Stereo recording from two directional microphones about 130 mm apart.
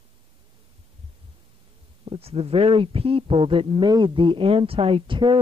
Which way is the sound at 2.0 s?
50° right (ahead or behind).